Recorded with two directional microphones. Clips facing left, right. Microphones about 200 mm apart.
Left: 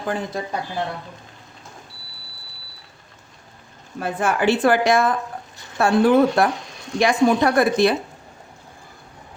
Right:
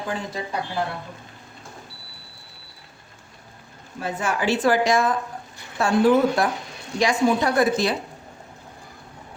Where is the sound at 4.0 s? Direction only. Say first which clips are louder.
Left 4 dB; 55° left (ahead or behind).